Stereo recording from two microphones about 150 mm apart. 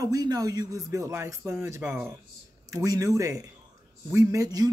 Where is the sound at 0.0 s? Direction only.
25° right (ahead or behind).